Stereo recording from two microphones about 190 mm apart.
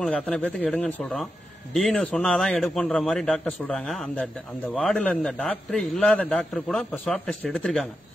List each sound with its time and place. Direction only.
0.0 s a man's voice: 5° left (ahead or behind)